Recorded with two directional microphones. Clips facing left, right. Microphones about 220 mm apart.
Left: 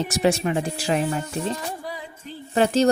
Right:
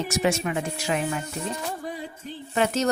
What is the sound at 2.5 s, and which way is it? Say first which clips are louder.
Speech: left 5 dB; 30° left (ahead or behind).